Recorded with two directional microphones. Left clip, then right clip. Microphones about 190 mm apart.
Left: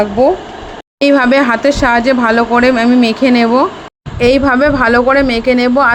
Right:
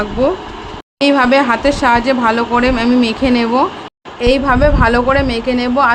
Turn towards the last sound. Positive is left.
turn(degrees=20)  # may be behind; listen again after turning